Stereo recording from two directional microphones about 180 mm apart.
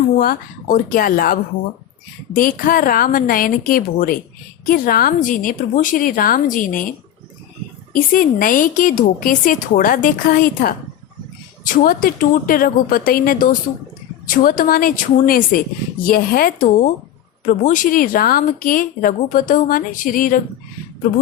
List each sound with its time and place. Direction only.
0.2 s a woman's voice: 50° left (ahead or behind)
7.9 s a woman's voice: 50° left (ahead or behind)